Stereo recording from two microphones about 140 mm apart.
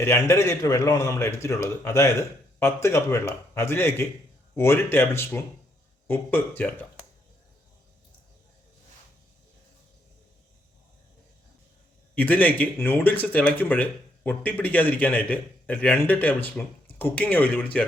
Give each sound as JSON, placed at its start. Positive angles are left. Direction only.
{"t": 0.0, "sound": "a man's voice", "side_deg": 20}
{"t": 12.1, "sound": "a man's voice", "side_deg": 10}